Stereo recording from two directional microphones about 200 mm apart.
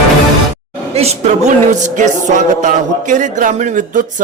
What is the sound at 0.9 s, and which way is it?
A man's voice, 30° right (ahead or behind).